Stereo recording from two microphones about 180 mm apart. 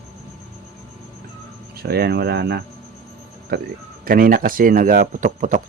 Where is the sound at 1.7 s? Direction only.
60° right (ahead or behind).